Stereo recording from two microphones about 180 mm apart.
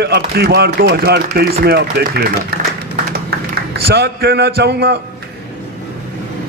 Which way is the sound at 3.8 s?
65° right (ahead or behind).